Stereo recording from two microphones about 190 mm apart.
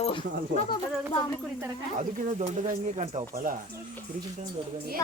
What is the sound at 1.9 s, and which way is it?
Speech, 40° right (ahead or behind).